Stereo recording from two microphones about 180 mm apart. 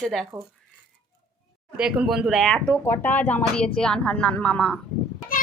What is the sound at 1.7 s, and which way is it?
Speech, 5° right (ahead or behind).